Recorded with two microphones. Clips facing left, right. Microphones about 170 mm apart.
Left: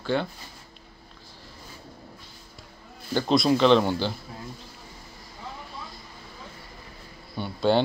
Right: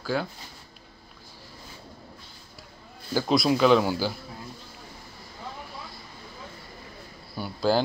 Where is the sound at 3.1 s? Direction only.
5° right (ahead or behind).